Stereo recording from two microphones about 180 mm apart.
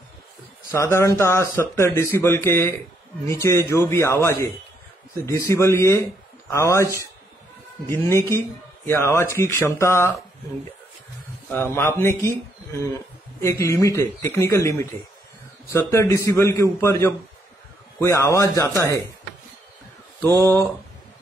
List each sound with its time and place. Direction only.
0.7 s speech: 15° left (ahead or behind)
11.5 s speech: 10° left (ahead or behind)